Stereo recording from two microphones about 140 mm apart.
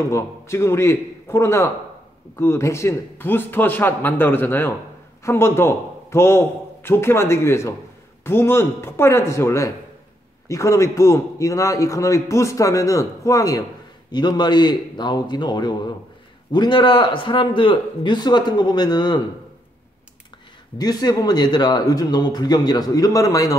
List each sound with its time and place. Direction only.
0.1 s a man's voice: 20° left (ahead or behind)
20.7 s a man's voice: 30° left (ahead or behind)